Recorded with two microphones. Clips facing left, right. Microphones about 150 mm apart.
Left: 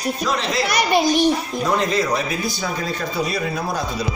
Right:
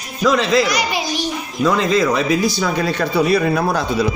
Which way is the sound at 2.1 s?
90° right.